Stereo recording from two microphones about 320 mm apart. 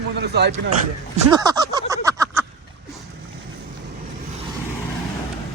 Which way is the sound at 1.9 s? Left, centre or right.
Centre.